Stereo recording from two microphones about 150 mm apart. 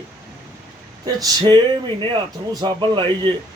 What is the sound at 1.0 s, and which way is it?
Speech, 25° right (ahead or behind).